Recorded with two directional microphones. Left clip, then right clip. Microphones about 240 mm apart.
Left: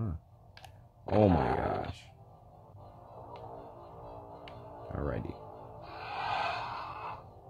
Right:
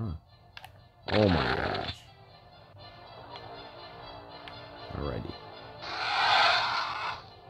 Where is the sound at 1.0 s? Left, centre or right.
Right.